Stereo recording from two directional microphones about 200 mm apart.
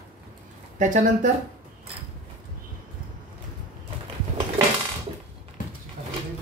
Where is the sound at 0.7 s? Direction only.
40° right (ahead or behind).